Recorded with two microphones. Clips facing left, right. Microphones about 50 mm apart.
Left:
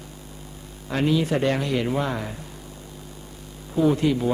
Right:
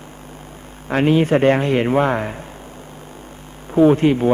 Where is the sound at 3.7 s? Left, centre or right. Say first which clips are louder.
Right 7 dB; right.